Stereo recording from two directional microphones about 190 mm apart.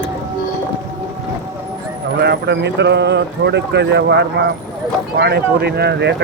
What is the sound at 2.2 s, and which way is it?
A man's voice, 60° right (ahead or behind).